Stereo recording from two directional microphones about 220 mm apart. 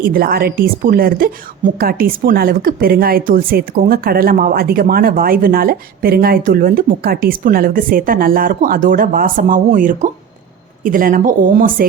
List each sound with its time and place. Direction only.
0.0 s a woman's voice: 40° right (ahead or behind)